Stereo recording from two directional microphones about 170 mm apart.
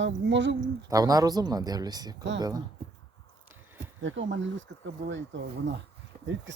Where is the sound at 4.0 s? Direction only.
90° right.